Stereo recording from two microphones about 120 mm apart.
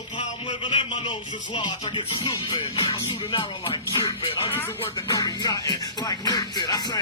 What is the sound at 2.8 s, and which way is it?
Speech, 30° left (ahead or behind).